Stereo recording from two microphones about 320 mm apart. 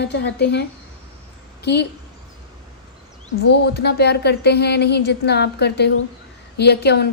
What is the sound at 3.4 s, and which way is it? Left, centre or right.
A woman's voice, left.